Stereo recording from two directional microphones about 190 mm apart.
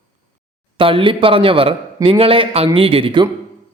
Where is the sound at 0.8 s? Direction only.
30° right (ahead or behind).